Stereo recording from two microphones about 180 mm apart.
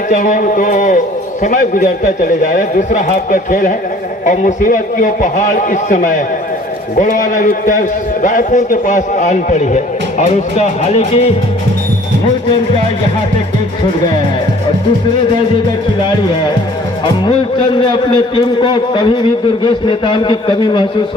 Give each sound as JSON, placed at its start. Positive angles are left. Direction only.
{"t": 0.1, "sound": "a man's voice", "side_deg": 45}
{"t": 17.2, "sound": "a man's voice", "side_deg": 25}